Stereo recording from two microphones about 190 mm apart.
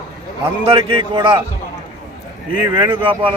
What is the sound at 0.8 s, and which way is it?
Speech, 25° right (ahead or behind).